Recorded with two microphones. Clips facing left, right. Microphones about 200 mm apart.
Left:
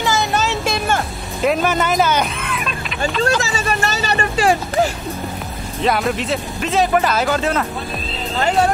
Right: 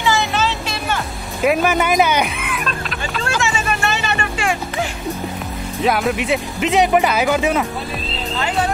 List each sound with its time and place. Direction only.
0.0 s music: 45° left (ahead or behind)
1.4 s speech: 10° right (ahead or behind)
3.0 s vehicle: 40° left (ahead or behind)
5.8 s speech: 5° right (ahead or behind)
8.4 s music: 45° left (ahead or behind)